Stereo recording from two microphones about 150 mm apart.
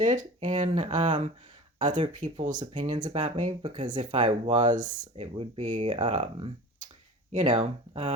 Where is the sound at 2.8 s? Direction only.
25° right (ahead or behind).